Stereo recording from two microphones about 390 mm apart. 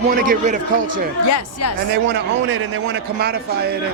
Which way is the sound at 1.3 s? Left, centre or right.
Left.